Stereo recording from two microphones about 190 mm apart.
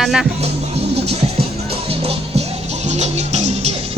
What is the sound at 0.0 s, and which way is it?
Speech, centre (ahead or behind).